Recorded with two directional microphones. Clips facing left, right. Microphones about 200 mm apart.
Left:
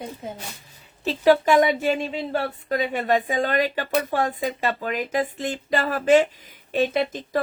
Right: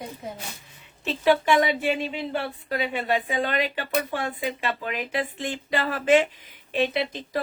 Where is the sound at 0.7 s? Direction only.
35° left (ahead or behind).